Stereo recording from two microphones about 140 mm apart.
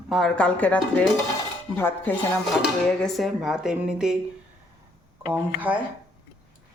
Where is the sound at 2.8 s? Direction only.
Centre (ahead or behind).